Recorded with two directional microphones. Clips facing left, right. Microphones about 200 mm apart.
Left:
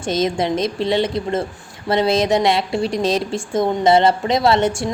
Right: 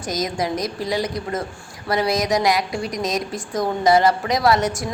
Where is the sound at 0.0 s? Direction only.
25° left (ahead or behind).